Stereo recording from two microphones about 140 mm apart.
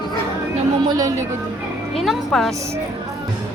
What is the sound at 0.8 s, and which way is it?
Speech, 25° right (ahead or behind).